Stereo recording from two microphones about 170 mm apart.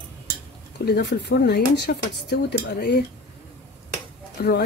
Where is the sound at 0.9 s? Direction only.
75° left (ahead or behind).